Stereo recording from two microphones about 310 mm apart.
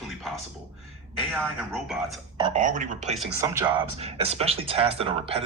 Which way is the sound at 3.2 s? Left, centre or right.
Centre.